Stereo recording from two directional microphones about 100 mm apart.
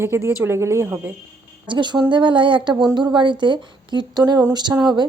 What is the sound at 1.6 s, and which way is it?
Speech, 50° right (ahead or behind).